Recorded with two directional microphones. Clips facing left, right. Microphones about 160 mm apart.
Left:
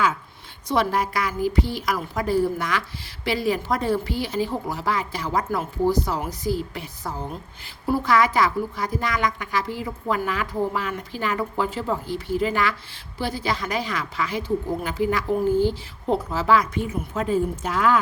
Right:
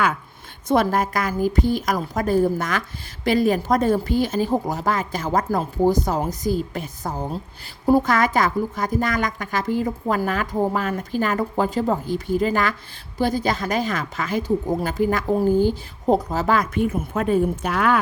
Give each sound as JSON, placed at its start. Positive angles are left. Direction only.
{"t": 0.7, "sound": "a woman's voice", "side_deg": -45}